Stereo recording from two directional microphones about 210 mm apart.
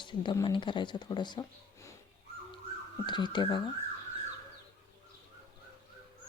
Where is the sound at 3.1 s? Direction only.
20° left (ahead or behind).